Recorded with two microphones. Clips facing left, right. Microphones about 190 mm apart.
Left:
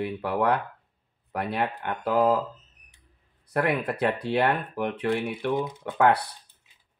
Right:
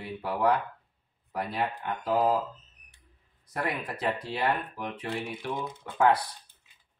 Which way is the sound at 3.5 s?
65° left (ahead or behind).